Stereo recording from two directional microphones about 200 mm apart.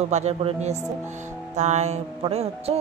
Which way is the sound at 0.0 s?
35° right (ahead or behind).